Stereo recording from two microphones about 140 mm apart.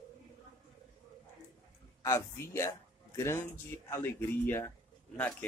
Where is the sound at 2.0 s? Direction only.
20° left (ahead or behind).